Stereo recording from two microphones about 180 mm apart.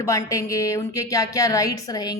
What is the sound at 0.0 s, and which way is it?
Speech, 15° left (ahead or behind).